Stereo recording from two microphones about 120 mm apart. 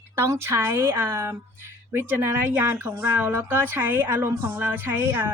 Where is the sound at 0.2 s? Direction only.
20° right (ahead or behind).